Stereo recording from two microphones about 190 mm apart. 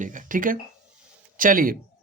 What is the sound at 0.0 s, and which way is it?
Speech, 45° right (ahead or behind).